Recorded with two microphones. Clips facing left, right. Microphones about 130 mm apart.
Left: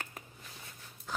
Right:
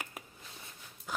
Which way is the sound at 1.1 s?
10° right (ahead or behind).